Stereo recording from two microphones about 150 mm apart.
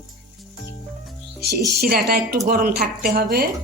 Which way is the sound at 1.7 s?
90° right.